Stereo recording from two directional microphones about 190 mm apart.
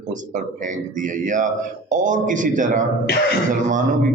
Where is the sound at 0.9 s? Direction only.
45° right (ahead or behind).